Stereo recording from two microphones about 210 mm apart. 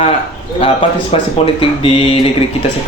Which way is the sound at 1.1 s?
30° left (ahead or behind).